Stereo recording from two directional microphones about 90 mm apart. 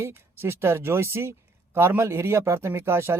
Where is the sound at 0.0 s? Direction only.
25° right (ahead or behind).